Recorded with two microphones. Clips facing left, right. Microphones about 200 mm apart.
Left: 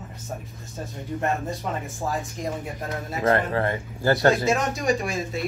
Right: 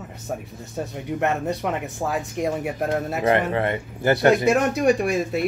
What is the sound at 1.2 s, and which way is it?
Speech, 70° right (ahead or behind).